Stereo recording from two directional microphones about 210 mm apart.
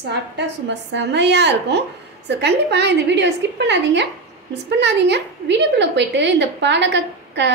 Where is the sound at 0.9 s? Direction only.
55° right (ahead or behind).